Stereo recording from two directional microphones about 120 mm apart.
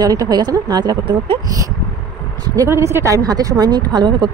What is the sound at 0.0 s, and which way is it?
Speech, 30° right (ahead or behind).